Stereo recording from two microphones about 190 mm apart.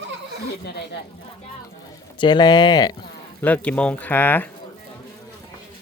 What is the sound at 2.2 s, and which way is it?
Speech, 20° left (ahead or behind).